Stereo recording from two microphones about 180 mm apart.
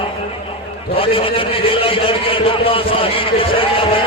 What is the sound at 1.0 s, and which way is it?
A man's voice, 30° left (ahead or behind).